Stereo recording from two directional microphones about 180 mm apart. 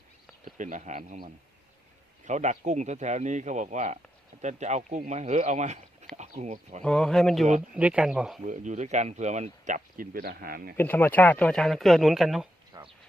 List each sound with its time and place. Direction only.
0.5 s speech: 45° right (ahead or behind)
2.2 s speech: 40° right (ahead or behind)
6.8 s speech: 5° left (ahead or behind)
7.4 s speech: 40° right (ahead or behind)
7.8 s speech: 5° right (ahead or behind)
8.4 s speech: 45° right (ahead or behind)
10.8 s speech: 10° left (ahead or behind)
12.7 s a sound: 20° right (ahead or behind)